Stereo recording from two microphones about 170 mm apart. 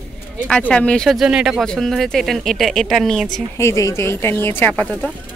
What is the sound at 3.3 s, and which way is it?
Speech, 20° left (ahead or behind).